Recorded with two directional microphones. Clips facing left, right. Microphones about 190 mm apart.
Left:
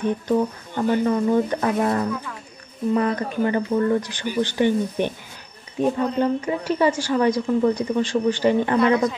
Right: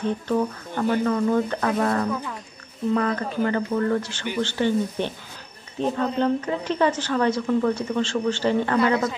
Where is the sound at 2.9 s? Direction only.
15° left (ahead or behind).